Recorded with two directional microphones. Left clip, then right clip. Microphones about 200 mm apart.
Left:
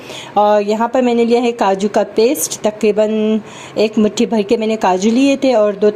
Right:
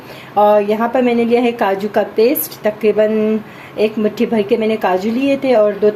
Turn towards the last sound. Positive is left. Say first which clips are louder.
# even
turn(degrees=35)  # may be behind; listen again after turning